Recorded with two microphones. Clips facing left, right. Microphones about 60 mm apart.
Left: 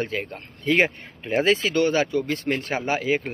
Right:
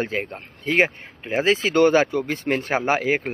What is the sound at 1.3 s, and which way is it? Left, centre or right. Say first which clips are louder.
Speech: even; centre.